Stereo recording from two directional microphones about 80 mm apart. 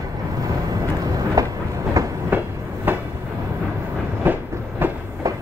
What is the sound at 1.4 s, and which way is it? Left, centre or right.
Train, right.